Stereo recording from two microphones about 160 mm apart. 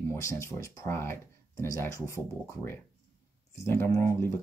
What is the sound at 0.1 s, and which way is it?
Speech, 20° left (ahead or behind).